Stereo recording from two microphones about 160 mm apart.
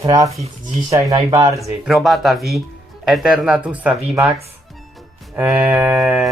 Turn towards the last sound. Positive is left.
turn(degrees=0)  # may be behind; listen again after turning